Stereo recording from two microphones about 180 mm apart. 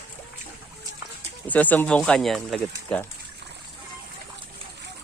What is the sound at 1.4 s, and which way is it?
Speech, 10° left (ahead or behind).